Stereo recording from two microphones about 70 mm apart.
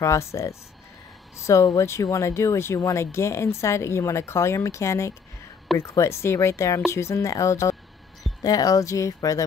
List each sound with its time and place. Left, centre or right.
0.0 s speech: left
8.4 s speech: left